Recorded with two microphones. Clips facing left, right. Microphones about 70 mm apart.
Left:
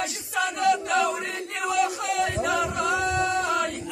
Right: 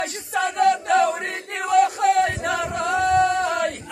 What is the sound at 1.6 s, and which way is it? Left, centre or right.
Chant, right.